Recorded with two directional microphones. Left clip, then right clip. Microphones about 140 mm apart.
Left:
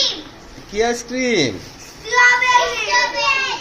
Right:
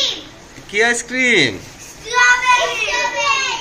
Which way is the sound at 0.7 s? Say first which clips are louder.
Right 3 dB; 15° left (ahead or behind).